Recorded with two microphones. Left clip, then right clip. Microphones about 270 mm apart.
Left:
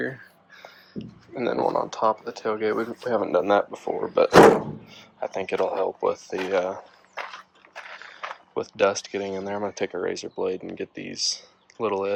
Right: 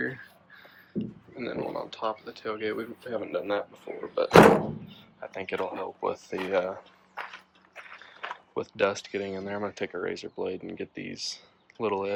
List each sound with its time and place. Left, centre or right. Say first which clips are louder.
0.0 s speech: left 2 dB; centre
6.1 s speech: left 5 dB; centre
8.3 s speech: left 3 dB; centre